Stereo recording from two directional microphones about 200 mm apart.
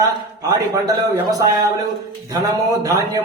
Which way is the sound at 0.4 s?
15° right (ahead or behind).